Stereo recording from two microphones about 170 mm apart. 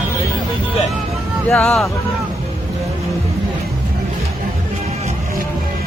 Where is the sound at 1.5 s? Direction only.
Centre (ahead or behind).